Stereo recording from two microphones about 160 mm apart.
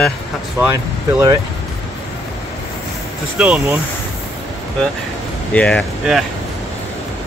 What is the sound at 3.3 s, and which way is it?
Speech, 5° right (ahead or behind).